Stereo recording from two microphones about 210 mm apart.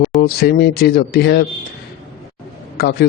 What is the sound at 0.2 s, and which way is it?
A man's voice, 50° left (ahead or behind).